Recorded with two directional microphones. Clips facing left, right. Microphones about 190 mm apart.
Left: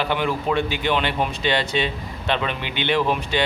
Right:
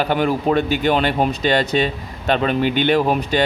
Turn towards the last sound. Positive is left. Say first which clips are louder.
# right 4 dB
turn(degrees=-45)  # may be behind; listen again after turning